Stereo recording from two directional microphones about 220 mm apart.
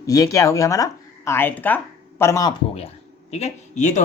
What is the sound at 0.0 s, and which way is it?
Speech, 15° left (ahead or behind).